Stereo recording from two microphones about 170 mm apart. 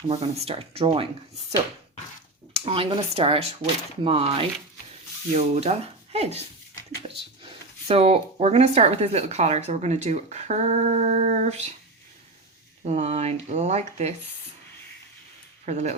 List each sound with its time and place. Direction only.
0.1 s speech: 35° right (ahead or behind)
2.5 s speech: 35° right (ahead or behind)
12.8 s speech: 40° right (ahead or behind)
15.6 s speech: 45° right (ahead or behind)